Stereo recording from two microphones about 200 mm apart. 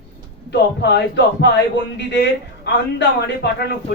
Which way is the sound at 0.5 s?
60° left (ahead or behind).